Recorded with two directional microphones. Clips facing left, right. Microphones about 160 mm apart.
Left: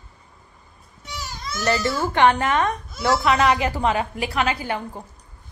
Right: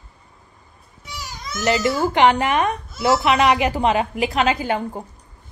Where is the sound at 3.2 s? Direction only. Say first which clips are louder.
Even; 20° right (ahead or behind).